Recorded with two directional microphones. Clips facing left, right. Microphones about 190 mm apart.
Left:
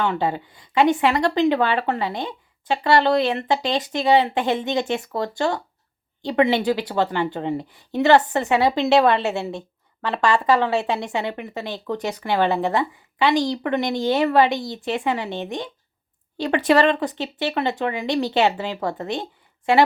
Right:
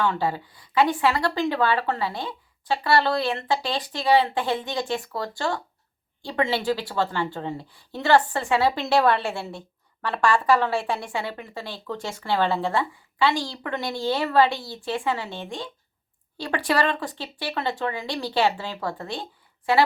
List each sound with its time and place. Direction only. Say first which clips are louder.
0.0 s a woman's voice: left 2 dB; 20° left (ahead or behind)